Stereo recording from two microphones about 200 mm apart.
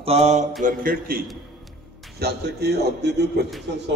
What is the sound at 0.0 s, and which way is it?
Mantra, 30° right (ahead or behind).